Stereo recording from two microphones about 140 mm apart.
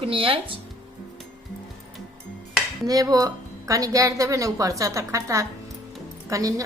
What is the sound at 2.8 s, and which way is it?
A woman's voice, 25° right (ahead or behind).